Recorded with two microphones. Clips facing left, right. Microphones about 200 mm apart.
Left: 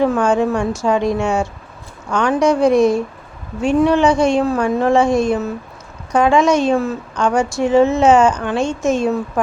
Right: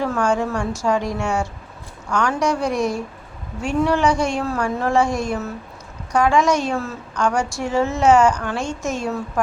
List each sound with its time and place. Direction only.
0.0 s a woman's voice: 20° left (ahead or behind)